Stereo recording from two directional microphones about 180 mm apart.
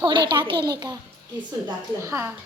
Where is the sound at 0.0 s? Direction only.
25° right (ahead or behind).